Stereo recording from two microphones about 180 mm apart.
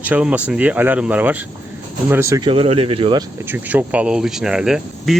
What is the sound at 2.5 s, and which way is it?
Speech, 30° right (ahead or behind).